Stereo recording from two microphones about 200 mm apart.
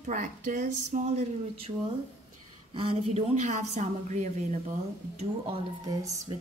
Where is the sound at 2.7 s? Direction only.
25° right (ahead or behind).